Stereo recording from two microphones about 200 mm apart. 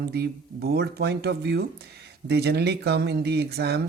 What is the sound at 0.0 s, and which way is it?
Speech, 55° right (ahead or behind).